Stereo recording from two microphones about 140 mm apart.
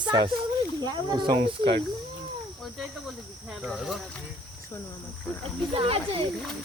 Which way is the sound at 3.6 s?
Centre (ahead or behind).